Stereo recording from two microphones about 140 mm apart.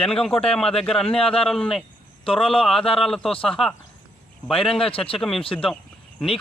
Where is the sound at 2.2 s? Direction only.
40° left (ahead or behind).